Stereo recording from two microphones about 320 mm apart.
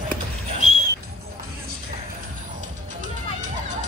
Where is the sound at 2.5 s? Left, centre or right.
Right.